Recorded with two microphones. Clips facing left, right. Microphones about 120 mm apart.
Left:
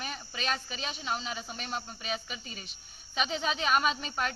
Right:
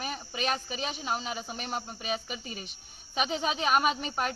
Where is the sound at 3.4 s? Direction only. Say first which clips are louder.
Right 2 dB; 15° right (ahead or behind).